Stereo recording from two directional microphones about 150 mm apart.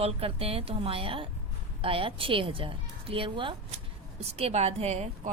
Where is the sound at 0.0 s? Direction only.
40° right (ahead or behind).